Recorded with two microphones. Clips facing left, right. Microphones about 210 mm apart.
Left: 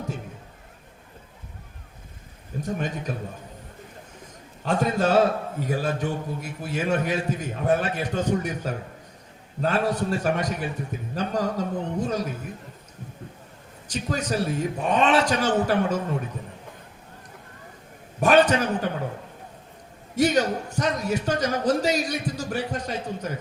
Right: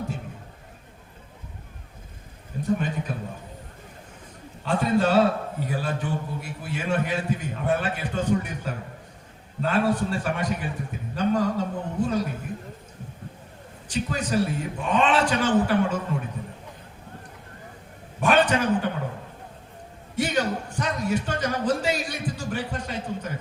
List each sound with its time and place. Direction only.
2.6 s a man's voice: 45° left (ahead or behind)
4.6 s a man's voice: 40° left (ahead or behind)
13.8 s a man's voice: 40° left (ahead or behind)
18.2 s a man's voice: 40° left (ahead or behind)
20.1 s a sound: 40° left (ahead or behind)